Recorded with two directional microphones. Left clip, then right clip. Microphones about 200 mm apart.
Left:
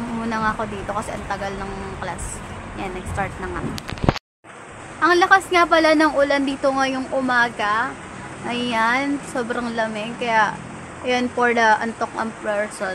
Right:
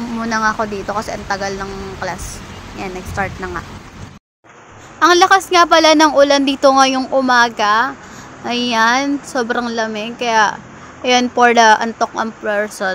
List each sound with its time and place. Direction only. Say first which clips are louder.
0.3 s speech: right 7 dB; 30° right (ahead or behind)
3.2 s speech: right 5 dB; 25° right (ahead or behind)
5.0 s a woman's voice: right 5 dB; 50° right (ahead or behind)